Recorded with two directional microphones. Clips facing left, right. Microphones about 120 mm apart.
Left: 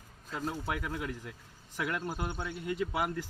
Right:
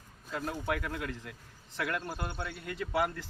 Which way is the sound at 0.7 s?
20° left (ahead or behind).